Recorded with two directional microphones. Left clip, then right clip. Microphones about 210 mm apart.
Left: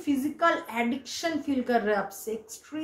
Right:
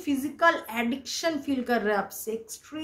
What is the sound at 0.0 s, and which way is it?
A woman's voice, 30° right (ahead or behind).